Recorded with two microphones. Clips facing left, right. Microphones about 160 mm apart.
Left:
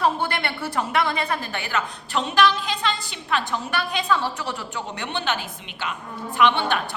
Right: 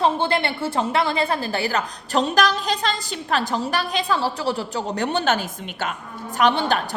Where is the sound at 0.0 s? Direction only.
25° right (ahead or behind).